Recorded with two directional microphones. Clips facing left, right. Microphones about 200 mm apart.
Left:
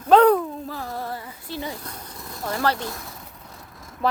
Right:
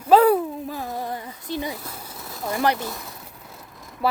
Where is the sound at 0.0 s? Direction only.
5° right (ahead or behind).